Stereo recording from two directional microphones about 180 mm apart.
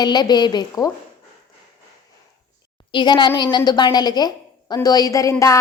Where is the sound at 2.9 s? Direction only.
25° left (ahead or behind).